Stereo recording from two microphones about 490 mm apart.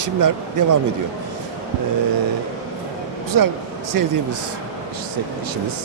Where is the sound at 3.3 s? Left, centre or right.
Right.